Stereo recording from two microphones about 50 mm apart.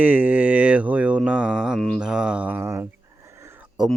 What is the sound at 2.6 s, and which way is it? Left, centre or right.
Speech, right.